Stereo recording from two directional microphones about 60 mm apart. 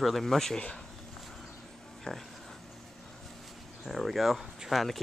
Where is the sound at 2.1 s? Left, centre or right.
Centre.